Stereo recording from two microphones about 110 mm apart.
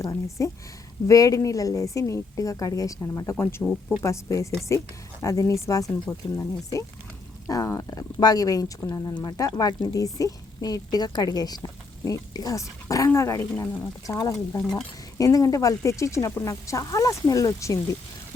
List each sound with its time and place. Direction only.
0.0 s a woman's voice: 30° left (ahead or behind)
15.2 s a woman's voice: 35° left (ahead or behind)